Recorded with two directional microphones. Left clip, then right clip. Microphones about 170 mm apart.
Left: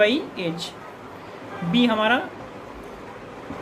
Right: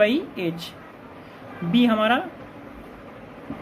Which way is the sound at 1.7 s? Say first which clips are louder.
Even; 25° right (ahead or behind).